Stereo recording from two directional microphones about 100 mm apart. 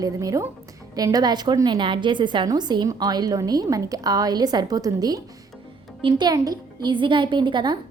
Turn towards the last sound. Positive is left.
turn(degrees=-50)  # may be behind; listen again after turning